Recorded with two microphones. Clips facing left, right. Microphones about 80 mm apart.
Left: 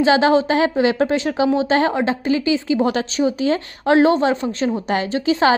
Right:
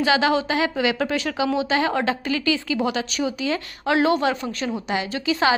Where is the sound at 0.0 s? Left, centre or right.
Left.